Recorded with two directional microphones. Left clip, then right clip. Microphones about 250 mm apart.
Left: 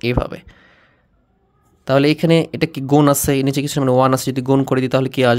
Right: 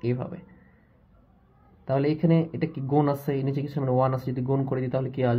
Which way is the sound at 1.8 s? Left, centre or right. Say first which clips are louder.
Left 10 dB; left.